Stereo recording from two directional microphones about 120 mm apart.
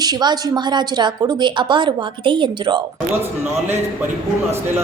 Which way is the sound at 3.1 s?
15° right (ahead or behind).